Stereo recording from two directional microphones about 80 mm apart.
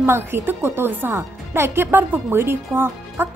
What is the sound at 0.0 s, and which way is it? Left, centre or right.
Speech, right.